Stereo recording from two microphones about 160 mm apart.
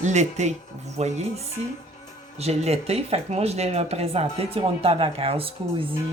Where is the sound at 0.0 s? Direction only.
45° right (ahead or behind).